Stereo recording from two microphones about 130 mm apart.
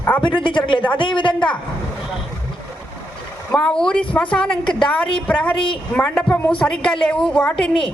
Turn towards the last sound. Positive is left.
turn(degrees=5)  # may be behind; listen again after turning